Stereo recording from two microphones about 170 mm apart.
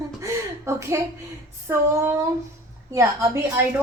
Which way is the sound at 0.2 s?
15° right (ahead or behind).